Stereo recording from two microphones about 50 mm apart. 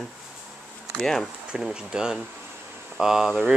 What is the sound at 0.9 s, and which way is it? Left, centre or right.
Speech, centre.